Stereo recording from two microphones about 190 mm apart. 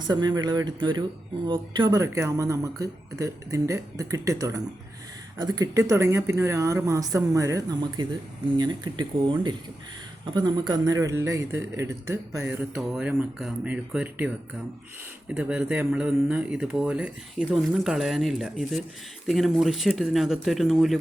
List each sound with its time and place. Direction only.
0.1 s speech: 20° right (ahead or behind)
12.5 s speech: 5° right (ahead or behind)
15.3 s speech: 5° right (ahead or behind)